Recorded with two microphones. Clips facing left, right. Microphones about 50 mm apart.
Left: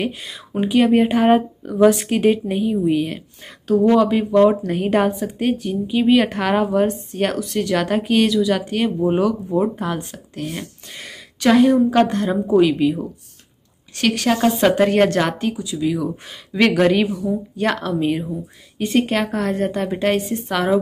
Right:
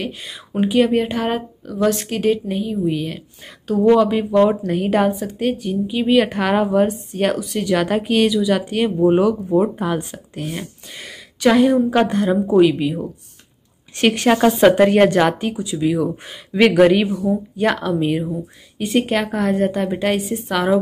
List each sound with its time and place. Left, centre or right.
0.0 s a woman's voice: centre
13.9 s a woman's voice: right
14.6 s a woman's voice: centre